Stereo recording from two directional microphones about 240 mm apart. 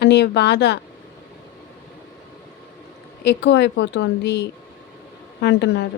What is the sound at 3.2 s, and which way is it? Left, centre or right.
Speech, left.